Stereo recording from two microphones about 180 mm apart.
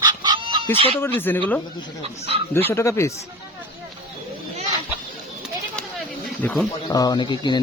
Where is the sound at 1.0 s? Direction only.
10° left (ahead or behind).